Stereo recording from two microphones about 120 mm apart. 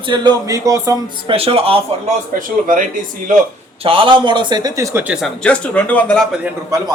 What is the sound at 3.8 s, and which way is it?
Speech, 50° right (ahead or behind).